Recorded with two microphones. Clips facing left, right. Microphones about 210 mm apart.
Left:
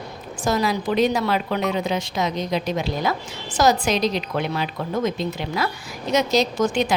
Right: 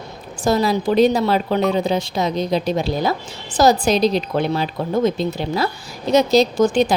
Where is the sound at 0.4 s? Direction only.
30° right (ahead or behind).